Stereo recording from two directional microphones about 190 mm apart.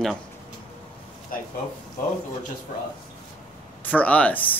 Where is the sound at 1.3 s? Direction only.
50° left (ahead or behind).